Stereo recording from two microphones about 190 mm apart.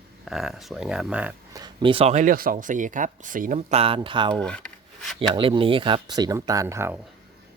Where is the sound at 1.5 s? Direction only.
25° right (ahead or behind).